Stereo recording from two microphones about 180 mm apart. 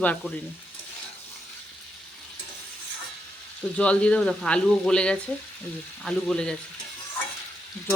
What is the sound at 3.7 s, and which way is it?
Speech, 5° left (ahead or behind).